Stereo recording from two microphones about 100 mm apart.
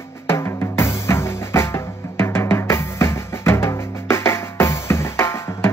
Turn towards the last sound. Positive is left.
turn(degrees=25)  # may be behind; listen again after turning